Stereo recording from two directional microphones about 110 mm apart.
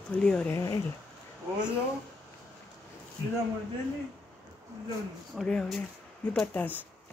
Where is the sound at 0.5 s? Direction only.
30° left (ahead or behind).